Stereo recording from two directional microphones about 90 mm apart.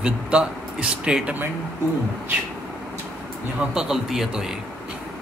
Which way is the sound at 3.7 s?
5° right (ahead or behind).